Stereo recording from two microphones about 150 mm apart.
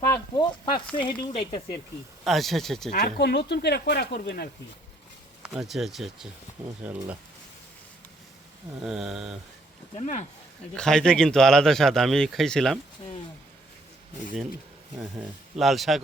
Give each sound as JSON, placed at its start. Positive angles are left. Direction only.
{"t": 0.1, "sound": "chopping", "side_deg": 30}
{"t": 0.9, "sound": "speech", "side_deg": 35}
{"t": 2.2, "sound": "a man's voice", "side_deg": 0}
{"t": 2.9, "sound": "speech", "side_deg": 75}
{"t": 5.4, "sound": "a man's voice", "side_deg": 0}
{"t": 8.8, "sound": "a man's voice", "side_deg": -5}
{"t": 10.8, "sound": "a man's voice", "side_deg": 5}
{"t": 15.5, "sound": "a man's voice", "side_deg": 0}